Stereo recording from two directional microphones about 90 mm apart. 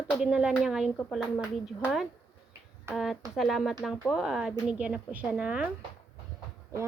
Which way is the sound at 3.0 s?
Centre (ahead or behind).